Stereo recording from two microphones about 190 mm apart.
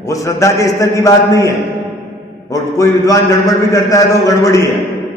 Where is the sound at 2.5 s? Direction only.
20° left (ahead or behind).